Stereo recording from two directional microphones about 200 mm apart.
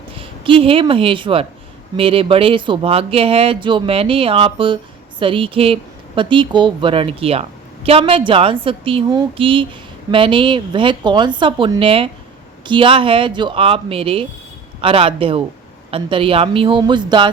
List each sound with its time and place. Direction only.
0.1 s speech: 25° right (ahead or behind)